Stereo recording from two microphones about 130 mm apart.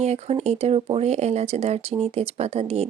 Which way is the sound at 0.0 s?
55° right (ahead or behind).